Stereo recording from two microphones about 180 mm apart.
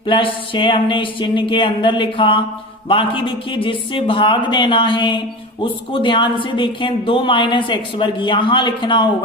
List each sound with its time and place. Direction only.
0.1 s a woman's voice: 30° left (ahead or behind)